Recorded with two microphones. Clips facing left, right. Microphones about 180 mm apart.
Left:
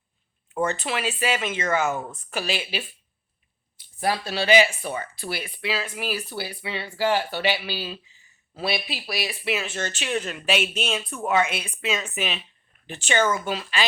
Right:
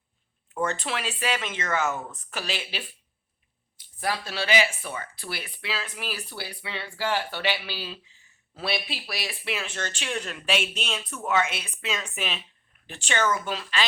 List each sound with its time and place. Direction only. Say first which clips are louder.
0.6 s speech: left 3 dB; 5° left (ahead or behind)
4.3 s speech: left 7 dB; 15° left (ahead or behind)